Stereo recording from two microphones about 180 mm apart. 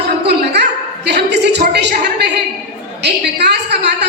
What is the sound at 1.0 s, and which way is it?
A woman's voice, 70° right (ahead or behind).